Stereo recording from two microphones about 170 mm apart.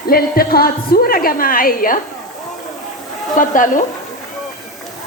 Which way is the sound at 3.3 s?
50° left (ahead or behind).